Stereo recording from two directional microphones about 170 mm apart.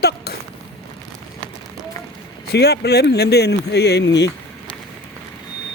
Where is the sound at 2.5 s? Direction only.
75° left (ahead or behind).